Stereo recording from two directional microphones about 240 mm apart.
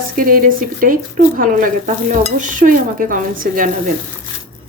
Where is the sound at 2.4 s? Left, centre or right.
Right.